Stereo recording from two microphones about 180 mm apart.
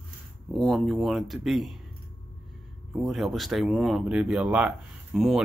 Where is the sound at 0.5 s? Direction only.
Centre (ahead or behind).